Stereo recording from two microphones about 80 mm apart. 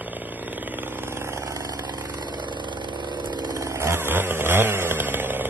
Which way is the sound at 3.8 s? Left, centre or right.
Right.